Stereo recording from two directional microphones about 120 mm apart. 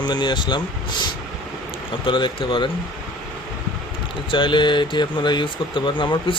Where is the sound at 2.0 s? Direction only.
45° left (ahead or behind).